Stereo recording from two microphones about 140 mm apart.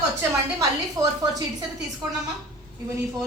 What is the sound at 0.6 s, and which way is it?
Speech, 25° right (ahead or behind).